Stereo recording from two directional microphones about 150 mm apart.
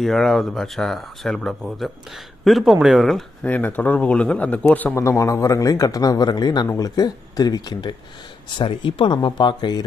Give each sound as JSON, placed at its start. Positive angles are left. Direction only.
{"t": 0.0, "sound": "speech", "side_deg": 0}
{"t": 3.4, "sound": "a man's voice", "side_deg": 10}